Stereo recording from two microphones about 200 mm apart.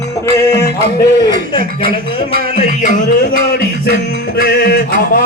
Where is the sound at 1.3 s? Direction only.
25° left (ahead or behind).